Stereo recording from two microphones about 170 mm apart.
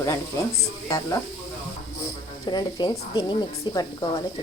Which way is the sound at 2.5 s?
25° left (ahead or behind).